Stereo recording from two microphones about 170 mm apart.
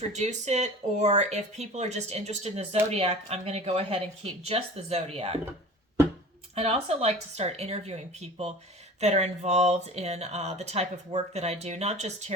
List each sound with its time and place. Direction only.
0.1 s speech: 40° right (ahead or behind)
6.6 s speech: 35° right (ahead or behind)